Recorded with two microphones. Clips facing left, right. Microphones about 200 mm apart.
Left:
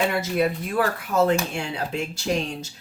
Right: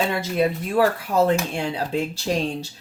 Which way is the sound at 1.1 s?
30° right (ahead or behind).